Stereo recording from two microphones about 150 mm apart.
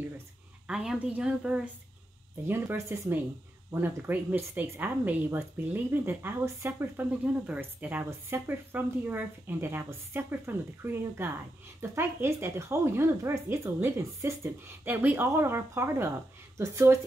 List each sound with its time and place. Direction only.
0.7 s speech: 5° right (ahead or behind)